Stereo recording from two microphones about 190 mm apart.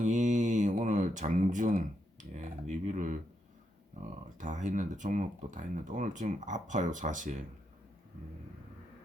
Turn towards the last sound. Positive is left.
turn(degrees=-40)  # may be behind; listen again after turning